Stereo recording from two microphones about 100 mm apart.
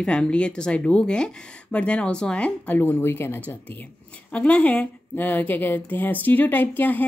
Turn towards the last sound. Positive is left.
turn(degrees=20)  # may be behind; listen again after turning